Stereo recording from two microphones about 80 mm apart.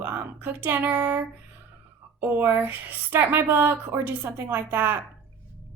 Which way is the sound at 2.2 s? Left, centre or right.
Right.